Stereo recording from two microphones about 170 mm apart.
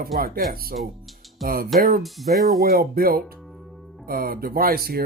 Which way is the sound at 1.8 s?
60° right (ahead or behind).